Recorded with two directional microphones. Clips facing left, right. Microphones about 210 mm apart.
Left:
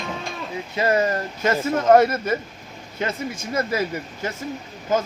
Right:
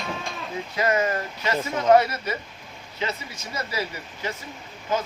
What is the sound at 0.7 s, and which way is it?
Speech, 30° left (ahead or behind).